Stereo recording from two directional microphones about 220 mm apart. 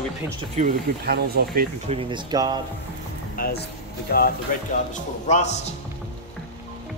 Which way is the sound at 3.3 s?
40° left (ahead or behind).